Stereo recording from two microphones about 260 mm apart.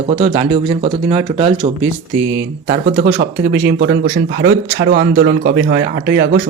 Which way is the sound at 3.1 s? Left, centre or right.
Right.